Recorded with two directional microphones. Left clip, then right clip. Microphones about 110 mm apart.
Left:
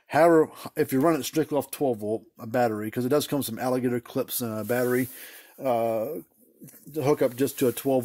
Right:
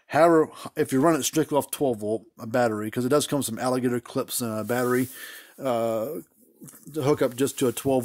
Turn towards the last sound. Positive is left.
turn(degrees=-20)  # may be behind; listen again after turning